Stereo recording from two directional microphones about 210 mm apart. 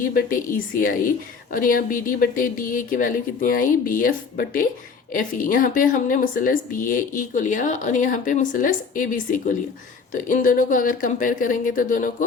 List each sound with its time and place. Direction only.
0.0 s speech: 40° left (ahead or behind)